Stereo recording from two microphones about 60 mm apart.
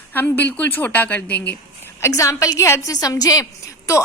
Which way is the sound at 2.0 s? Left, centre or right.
Left.